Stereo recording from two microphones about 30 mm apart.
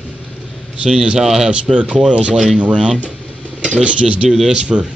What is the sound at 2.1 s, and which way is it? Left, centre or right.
Speech, right.